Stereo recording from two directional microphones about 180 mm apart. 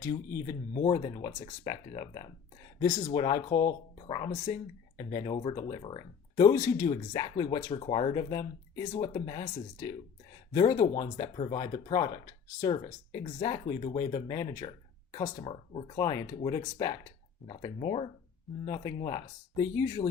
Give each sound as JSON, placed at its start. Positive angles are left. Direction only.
{"t": 0.0, "sound": "speech", "side_deg": 20}